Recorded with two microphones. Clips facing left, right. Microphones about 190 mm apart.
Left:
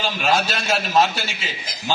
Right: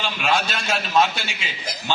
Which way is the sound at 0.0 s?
40° left (ahead or behind).